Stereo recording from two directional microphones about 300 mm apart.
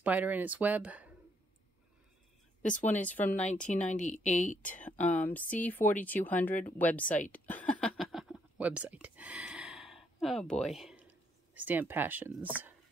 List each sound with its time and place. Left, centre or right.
0.0 s speech: centre
2.8 s speech: centre
3.9 s speech: left
4.7 s speech: centre
7.3 s whispering: centre
10.2 s speech: centre